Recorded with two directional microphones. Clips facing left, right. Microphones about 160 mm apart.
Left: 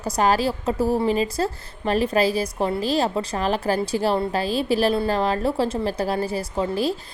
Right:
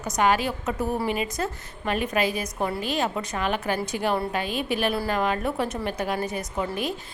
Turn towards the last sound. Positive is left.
turn(degrees=30)  # may be behind; listen again after turning